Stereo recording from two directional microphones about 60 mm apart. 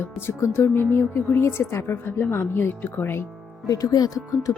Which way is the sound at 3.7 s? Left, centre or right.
Left.